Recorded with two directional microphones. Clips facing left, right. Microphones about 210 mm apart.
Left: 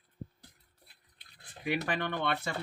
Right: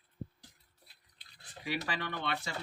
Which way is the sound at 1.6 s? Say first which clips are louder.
Left 5 dB; 55° left (ahead or behind).